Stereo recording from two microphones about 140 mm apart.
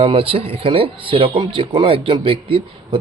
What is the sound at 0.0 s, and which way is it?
Speech, 40° right (ahead or behind).